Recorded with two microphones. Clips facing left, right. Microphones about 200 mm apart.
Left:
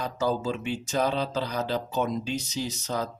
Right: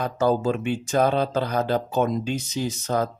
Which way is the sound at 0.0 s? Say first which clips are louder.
Right 6 dB; 55° right (ahead or behind).